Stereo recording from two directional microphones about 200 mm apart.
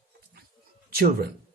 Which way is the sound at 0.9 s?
50° right (ahead or behind).